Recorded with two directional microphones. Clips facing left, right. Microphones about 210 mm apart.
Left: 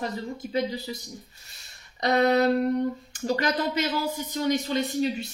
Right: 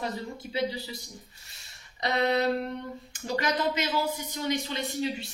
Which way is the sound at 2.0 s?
40° left (ahead or behind).